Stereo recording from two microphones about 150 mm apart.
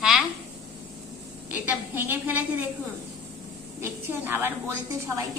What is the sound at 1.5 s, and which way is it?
A woman's voice, 10° right (ahead or behind).